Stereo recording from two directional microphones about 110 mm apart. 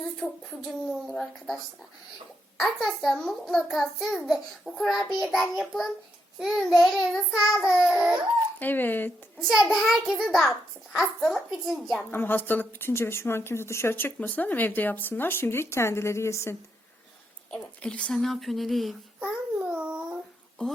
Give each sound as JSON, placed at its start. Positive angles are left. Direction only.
{"t": 0.2, "sound": "a child's voice", "side_deg": -5}
{"t": 2.6, "sound": "a child's voice", "side_deg": 0}
{"t": 7.9, "sound": "babbling", "side_deg": -10}
{"t": 8.5, "sound": "speech", "side_deg": 15}
{"t": 9.4, "sound": "a child's voice", "side_deg": 0}
{"t": 12.1, "sound": "speech", "side_deg": 20}
{"t": 17.5, "sound": "a child's voice", "side_deg": 10}
{"t": 19.2, "sound": "babbling", "side_deg": -10}